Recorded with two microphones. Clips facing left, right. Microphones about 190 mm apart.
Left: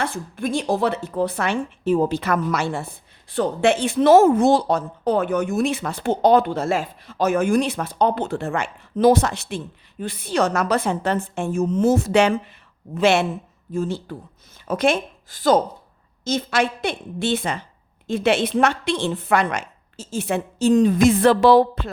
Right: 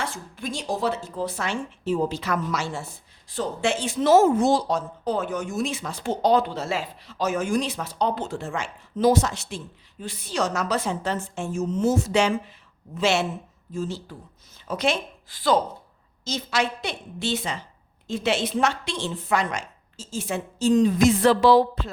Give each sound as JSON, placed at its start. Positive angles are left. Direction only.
{"t": 0.0, "sound": "a woman's voice", "side_deg": 55}